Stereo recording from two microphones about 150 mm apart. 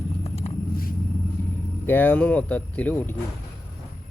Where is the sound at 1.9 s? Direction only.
10° left (ahead or behind).